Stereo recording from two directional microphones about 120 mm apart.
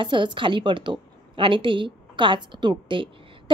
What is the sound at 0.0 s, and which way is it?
A woman's voice, 40° right (ahead or behind).